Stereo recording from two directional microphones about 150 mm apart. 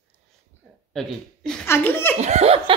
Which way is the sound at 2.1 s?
50° right (ahead or behind).